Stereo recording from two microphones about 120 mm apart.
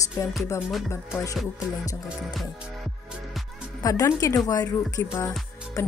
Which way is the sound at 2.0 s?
Centre (ahead or behind).